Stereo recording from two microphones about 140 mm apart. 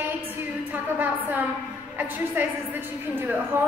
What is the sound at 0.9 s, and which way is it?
A woman's voice, 10° right (ahead or behind).